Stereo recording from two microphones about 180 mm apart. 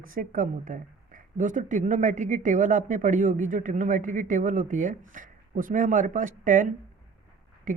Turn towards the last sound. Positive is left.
turn(degrees=-45)  # may be behind; listen again after turning